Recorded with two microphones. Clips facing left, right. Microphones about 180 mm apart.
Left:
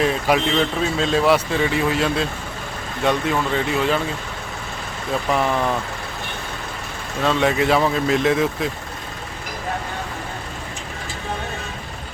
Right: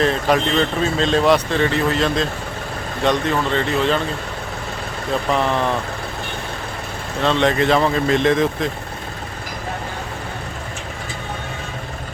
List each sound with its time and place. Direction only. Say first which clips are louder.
0.0 s speech: right 1 dB; 10° left (ahead or behind)
7.2 s speech: right 1 dB; 5° left (ahead or behind)